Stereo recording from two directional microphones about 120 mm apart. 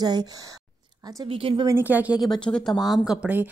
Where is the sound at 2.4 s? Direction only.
5° left (ahead or behind); by 3.4 s 10° right (ahead or behind).